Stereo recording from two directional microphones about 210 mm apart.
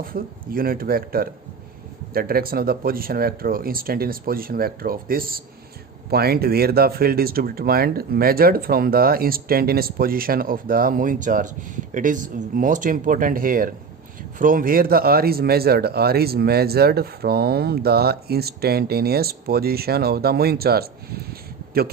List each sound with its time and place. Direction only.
0.0 s speech: 45° right (ahead or behind)